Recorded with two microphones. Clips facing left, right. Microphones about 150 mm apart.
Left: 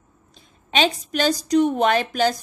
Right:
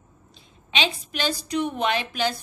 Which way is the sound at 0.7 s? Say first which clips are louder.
Left 6 dB; 45° left (ahead or behind).